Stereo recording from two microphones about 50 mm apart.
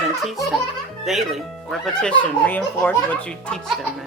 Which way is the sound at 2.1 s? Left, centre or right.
Left.